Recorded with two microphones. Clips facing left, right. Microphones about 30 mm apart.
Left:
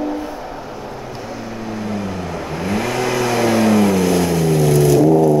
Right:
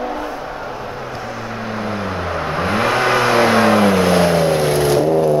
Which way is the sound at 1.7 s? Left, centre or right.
Right.